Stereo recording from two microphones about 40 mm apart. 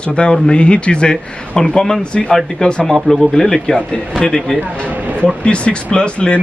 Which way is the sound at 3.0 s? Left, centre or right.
Centre.